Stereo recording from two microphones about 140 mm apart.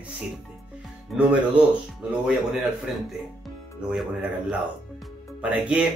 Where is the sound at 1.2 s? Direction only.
10° right (ahead or behind).